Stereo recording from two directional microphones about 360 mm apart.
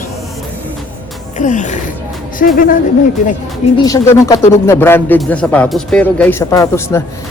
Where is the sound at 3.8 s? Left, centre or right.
Centre.